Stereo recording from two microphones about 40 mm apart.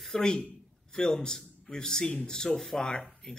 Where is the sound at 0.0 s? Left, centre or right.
Centre.